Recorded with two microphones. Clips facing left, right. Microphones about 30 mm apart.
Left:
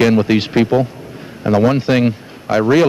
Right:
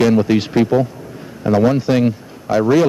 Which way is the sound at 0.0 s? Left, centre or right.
Left.